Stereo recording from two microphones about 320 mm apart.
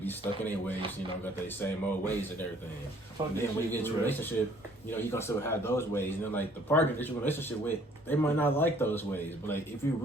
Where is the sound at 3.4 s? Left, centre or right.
Centre.